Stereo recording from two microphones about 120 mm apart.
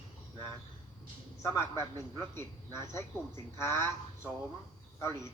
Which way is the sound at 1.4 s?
25° left (ahead or behind).